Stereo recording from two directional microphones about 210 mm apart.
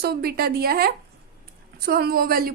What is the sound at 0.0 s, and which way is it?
A woman's voice, 50° right (ahead or behind).